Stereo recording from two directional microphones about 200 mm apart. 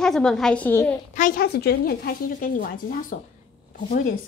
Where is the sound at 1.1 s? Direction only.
45° left (ahead or behind).